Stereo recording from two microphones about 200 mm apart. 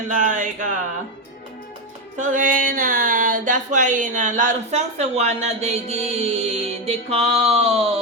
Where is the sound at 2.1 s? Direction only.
40° right (ahead or behind).